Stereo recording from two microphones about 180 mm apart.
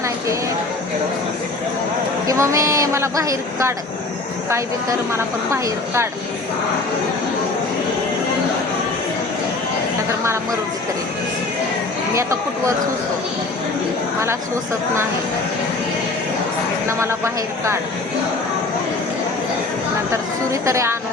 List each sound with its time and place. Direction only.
2.2 s speech: 15° right (ahead or behind)
12.1 s speech: 15° right (ahead or behind)
17.0 s speech: 15° right (ahead or behind)
20.5 s speech: 15° right (ahead or behind)